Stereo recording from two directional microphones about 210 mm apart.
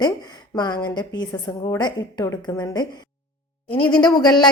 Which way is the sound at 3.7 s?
5° left (ahead or behind).